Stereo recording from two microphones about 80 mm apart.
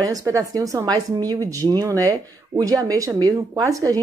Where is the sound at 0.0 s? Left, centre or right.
Right.